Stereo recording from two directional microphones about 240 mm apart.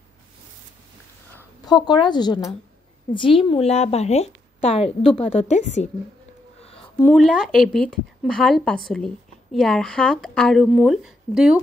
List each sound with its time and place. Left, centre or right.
1.7 s a woman's voice: centre
6.6 s a sound: left
7.0 s speech: centre